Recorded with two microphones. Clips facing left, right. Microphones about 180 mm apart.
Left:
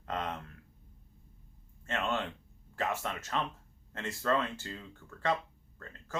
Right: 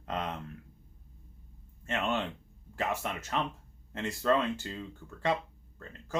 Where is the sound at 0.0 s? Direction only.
20° right (ahead or behind).